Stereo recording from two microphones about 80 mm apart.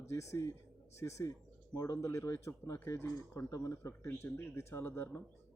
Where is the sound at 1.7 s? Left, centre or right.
Left.